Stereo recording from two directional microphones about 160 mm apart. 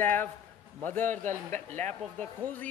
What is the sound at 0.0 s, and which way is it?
A man's voice, 10° left (ahead or behind).